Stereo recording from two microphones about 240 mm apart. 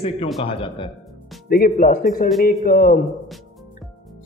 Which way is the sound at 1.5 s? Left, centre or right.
Left.